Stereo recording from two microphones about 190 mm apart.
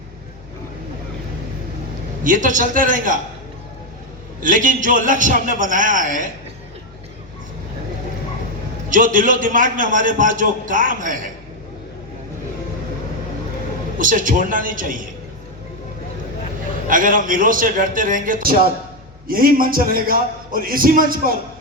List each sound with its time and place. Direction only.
2.2 s a man's voice: 45° right (ahead or behind)
4.4 s a man's voice: 45° right (ahead or behind)
8.9 s a man's voice: 45° right (ahead or behind)
14.0 s a man's voice: 45° right (ahead or behind)
16.9 s a man's voice: 45° right (ahead or behind)